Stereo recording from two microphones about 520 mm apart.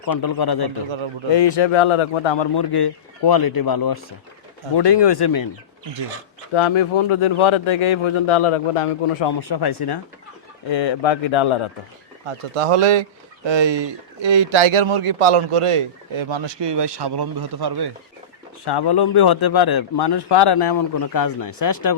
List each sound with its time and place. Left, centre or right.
0.0 s a man's voice: left
1.3 s a man's voice: left
6.5 s speech: left
9.2 s a man's voice: left
12.5 s speech: right
18.6 s a man's voice: left